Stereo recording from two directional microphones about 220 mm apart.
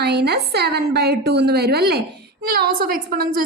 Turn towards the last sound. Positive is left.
turn(degrees=-40)  # may be behind; listen again after turning